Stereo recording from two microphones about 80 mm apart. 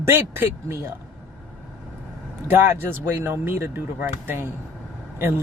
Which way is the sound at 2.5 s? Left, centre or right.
Right.